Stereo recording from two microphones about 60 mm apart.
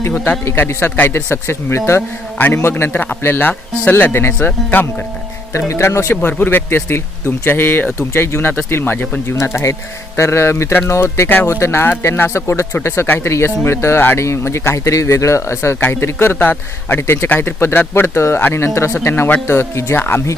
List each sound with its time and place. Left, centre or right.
0.7 s speech: left
2.0 s a man's voice: left
2.6 s speech: left
4.4 s speech: left
5.5 s speech: left
9.2 s speech: left
17.0 s speech: left
17.2 s speech: left